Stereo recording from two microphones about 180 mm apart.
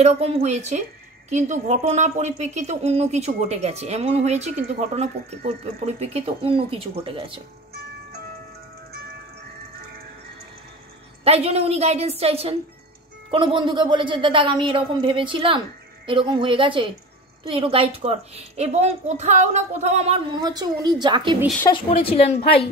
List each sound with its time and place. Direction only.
0.0 s a woman's voice: 40° right (ahead or behind)
11.2 s a woman's voice: 35° right (ahead or behind)
20.3 s speech: 20° right (ahead or behind)
21.6 s a woman's voice: 30° left (ahead or behind)